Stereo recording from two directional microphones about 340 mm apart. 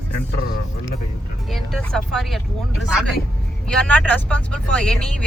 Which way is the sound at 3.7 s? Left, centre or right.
Centre.